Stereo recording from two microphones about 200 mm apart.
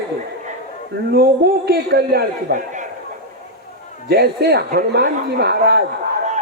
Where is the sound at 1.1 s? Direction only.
50° right (ahead or behind).